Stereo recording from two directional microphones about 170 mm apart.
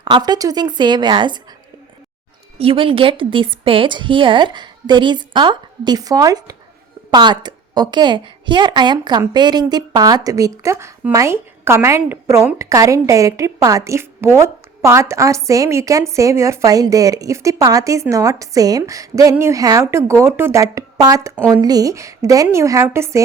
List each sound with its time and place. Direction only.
0.0 s a woman's voice: 25° right (ahead or behind)
2.6 s a woman's voice: 35° right (ahead or behind); by 23.2 s 15° right (ahead or behind)